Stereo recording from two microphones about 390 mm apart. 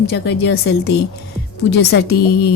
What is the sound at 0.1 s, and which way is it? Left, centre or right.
A woman's voice, left.